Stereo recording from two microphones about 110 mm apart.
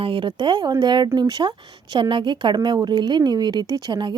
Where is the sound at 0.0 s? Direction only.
50° right (ahead or behind).